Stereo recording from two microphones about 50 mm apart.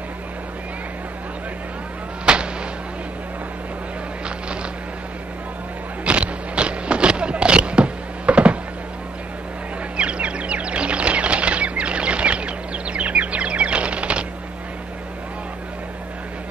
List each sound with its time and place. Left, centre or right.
2.3 s artillery fire: centre
6.0 s a sound: right
9.9 s bird flight: right